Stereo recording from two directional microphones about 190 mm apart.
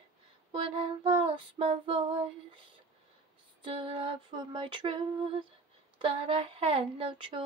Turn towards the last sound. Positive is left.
turn(degrees=-25)  # may be behind; listen again after turning